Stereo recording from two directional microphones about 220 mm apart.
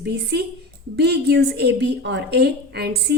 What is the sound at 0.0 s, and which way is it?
A woman's voice, 50° right (ahead or behind).